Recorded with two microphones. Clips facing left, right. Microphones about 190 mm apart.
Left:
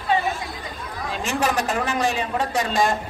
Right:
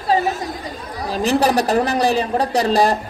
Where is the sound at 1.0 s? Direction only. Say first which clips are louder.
Right 7 dB; 35° right (ahead or behind).